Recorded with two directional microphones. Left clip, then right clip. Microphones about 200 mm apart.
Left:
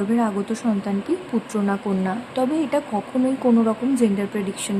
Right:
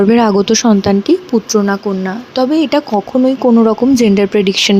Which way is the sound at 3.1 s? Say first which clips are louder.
Right 9 dB; 40° right (ahead or behind).